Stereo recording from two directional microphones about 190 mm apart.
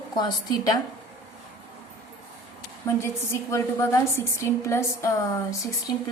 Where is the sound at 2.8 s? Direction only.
15° left (ahead or behind).